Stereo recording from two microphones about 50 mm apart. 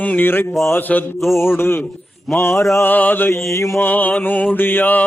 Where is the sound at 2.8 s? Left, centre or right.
Left.